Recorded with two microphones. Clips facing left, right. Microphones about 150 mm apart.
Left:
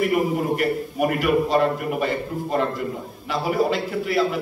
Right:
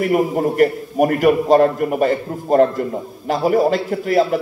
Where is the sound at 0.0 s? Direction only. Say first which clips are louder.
Right 4 dB; 45° right (ahead or behind).